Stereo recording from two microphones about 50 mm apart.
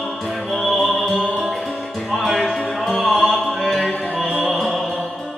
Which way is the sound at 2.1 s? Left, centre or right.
Centre.